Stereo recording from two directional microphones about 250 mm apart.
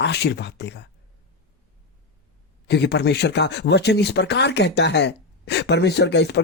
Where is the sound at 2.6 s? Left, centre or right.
Left.